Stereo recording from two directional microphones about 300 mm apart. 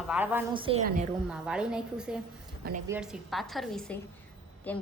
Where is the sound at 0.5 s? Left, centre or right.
Centre.